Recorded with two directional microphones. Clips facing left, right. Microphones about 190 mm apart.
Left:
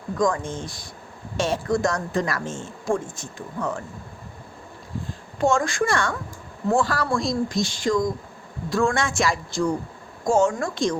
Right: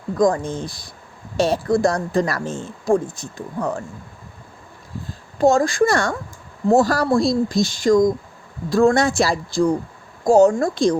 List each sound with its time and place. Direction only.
0.2 s speech: 35° right (ahead or behind)
5.4 s speech: 35° right (ahead or behind)